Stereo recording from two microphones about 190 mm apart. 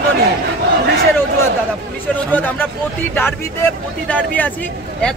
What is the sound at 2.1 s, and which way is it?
Speech, 10° left (ahead or behind).